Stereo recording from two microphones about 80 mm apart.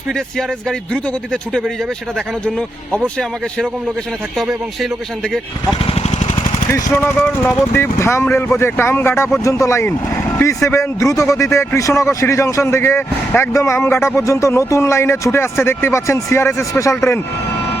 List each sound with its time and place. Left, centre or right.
1.3 s a man's voice: centre
4.4 s a man's voice: centre
6.9 s speech: left
7.6 s a man's voice: left